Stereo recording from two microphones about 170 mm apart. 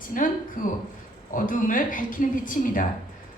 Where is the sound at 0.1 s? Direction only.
50° left (ahead or behind).